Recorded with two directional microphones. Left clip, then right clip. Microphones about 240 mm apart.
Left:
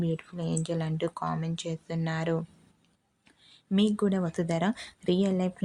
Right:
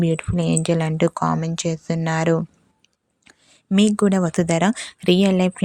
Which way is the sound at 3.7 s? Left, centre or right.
Right.